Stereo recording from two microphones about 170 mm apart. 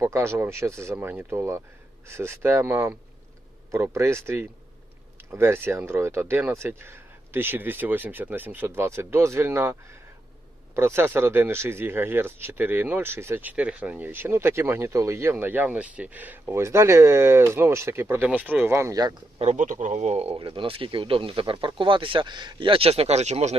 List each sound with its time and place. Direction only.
0.0 s speech: 15° right (ahead or behind)
10.8 s speech: 15° right (ahead or behind)
19.4 s speech: 45° right (ahead or behind)